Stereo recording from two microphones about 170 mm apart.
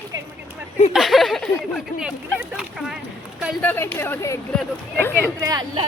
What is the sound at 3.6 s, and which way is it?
Speech, 10° left (ahead or behind).